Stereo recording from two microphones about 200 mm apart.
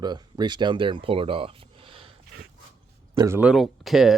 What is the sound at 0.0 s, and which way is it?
Speech, 20° right (ahead or behind).